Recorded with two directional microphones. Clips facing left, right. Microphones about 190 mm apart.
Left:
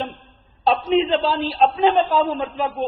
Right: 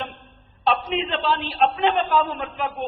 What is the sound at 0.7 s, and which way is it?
Speech, 35° left (ahead or behind).